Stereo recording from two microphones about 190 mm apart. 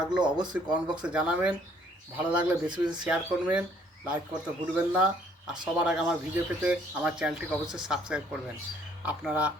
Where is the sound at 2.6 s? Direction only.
25° right (ahead or behind).